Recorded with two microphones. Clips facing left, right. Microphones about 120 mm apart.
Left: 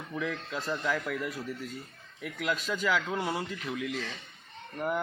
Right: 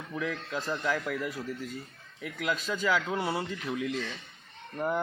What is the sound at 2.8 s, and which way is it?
Speech, 10° right (ahead or behind).